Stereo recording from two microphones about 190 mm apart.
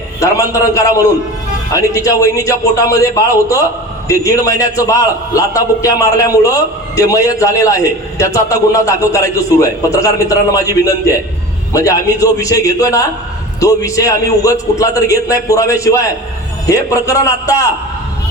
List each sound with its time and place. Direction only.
0.2 s a man's voice: 15° left (ahead or behind)